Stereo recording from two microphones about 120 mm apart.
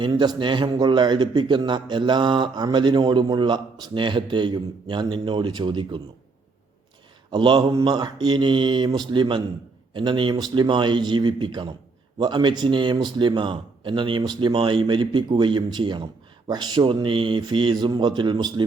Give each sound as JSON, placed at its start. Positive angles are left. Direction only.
{"t": 0.0, "sound": "a man's voice", "side_deg": -40}
{"t": 7.3, "sound": "a man's voice", "side_deg": -40}